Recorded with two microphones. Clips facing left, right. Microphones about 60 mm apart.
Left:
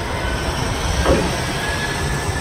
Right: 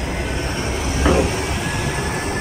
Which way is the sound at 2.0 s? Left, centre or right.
Right.